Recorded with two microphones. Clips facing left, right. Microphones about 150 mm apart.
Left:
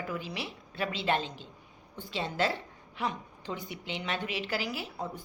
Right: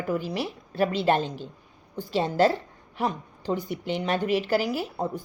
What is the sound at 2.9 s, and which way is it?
A woman's voice, 40° right (ahead or behind).